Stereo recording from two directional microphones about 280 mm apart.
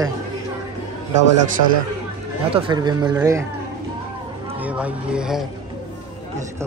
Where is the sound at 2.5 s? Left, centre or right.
Centre.